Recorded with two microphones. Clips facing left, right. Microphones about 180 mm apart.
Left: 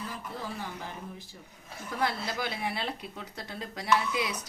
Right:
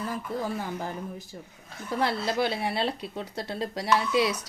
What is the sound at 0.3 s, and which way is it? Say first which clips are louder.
Speech: right 11 dB; 40° right (ahead or behind).